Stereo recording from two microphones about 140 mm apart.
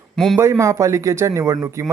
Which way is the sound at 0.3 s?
20° right (ahead or behind).